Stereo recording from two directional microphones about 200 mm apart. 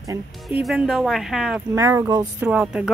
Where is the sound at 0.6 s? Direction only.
Centre (ahead or behind).